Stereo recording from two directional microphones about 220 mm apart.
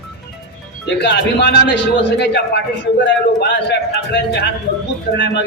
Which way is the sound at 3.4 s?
50° left (ahead or behind).